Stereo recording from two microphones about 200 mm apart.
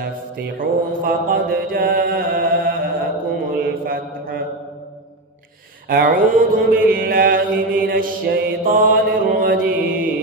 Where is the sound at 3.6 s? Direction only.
50° right (ahead or behind).